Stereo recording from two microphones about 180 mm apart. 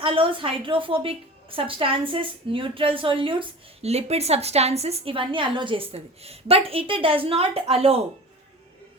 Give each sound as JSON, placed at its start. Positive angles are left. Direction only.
{"t": 0.0, "sound": "a woman's voice", "side_deg": -30}